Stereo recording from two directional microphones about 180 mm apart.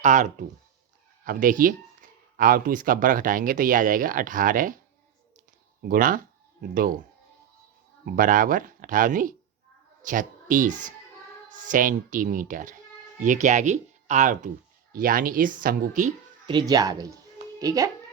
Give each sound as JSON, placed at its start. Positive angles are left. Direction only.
{"t": 0.0, "sound": "speech", "side_deg": -45}
{"t": 5.9, "sound": "speech", "side_deg": -50}
{"t": 8.0, "sound": "speech", "side_deg": -50}
{"t": 16.5, "sound": "speech", "side_deg": -25}